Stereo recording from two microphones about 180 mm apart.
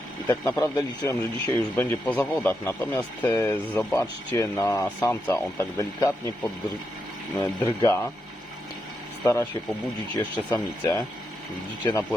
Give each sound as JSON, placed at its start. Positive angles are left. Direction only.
{"t": 0.3, "sound": "speech", "side_deg": 10}
{"t": 7.3, "sound": "speech", "side_deg": 10}
{"t": 9.2, "sound": "speech", "side_deg": 10}